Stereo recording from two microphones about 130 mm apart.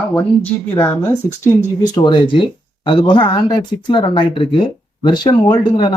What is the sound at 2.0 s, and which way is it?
Speech, 40° left (ahead or behind).